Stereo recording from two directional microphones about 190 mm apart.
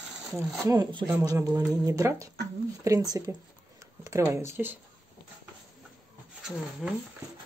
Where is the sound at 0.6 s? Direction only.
20° right (ahead or behind).